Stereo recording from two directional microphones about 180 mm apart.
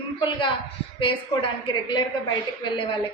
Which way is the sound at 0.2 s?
25° left (ahead or behind).